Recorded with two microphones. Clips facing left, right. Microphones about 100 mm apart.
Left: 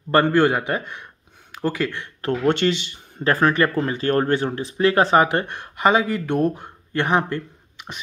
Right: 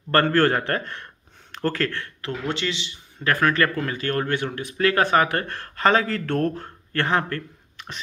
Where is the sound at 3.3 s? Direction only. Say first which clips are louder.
Left 3 dB; 30° left (ahead or behind).